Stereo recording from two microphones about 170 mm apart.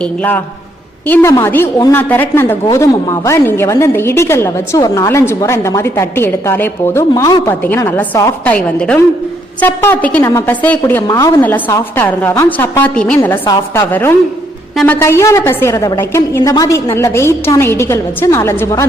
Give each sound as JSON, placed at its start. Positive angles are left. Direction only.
{"t": 0.0, "sound": "a woman's voice", "side_deg": 10}